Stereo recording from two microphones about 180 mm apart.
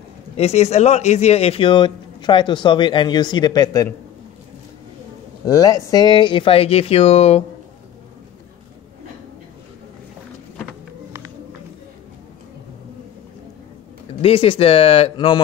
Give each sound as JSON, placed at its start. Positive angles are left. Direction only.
{"t": 0.4, "sound": "speech", "side_deg": 35}
{"t": 5.5, "sound": "speech", "side_deg": 20}
{"t": 14.2, "sound": "speech", "side_deg": 30}